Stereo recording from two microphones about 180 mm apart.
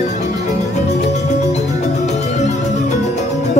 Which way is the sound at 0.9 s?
40° left (ahead or behind).